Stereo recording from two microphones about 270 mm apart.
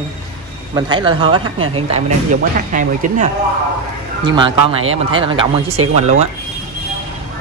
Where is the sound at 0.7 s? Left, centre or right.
Centre.